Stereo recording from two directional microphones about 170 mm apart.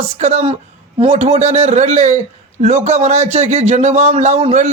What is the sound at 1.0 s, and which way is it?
Speech, 40° right (ahead or behind).